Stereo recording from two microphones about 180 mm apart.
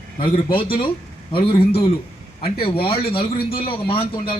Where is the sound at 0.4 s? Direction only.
30° left (ahead or behind).